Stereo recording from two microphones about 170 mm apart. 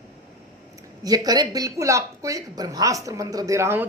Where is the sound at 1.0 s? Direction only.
20° right (ahead or behind).